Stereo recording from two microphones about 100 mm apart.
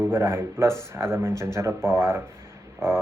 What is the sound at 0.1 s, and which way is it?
Speech, 25° right (ahead or behind).